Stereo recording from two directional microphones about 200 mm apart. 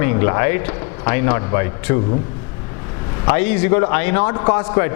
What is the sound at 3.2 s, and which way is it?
Speech, 10° left (ahead or behind).